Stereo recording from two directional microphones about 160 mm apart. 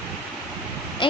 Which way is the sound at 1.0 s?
30° left (ahead or behind).